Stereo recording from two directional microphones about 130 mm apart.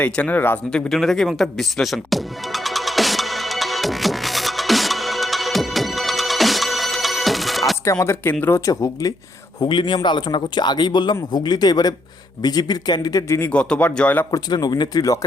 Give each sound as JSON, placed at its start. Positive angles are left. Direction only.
{"t": 0.0, "sound": "speech", "side_deg": 10}
{"t": 0.7, "sound": "music", "side_deg": 5}
{"t": 8.0, "sound": "speech", "side_deg": 20}
{"t": 9.6, "sound": "speech", "side_deg": 35}
{"t": 13.5, "sound": "speech", "side_deg": 10}
{"t": 14.3, "sound": "speech", "side_deg": 30}